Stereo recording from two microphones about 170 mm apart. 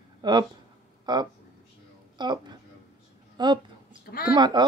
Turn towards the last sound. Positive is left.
turn(degrees=-25)  # may be behind; listen again after turning